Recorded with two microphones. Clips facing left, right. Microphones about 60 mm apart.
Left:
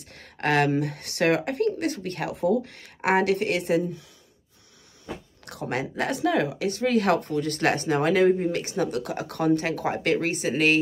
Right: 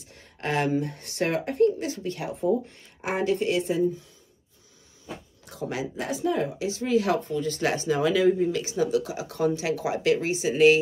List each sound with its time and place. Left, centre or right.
0.0 s speech: left
5.0 s speech: left